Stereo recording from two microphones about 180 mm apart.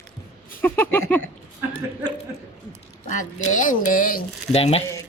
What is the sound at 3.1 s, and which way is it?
Speech, 45° left (ahead or behind).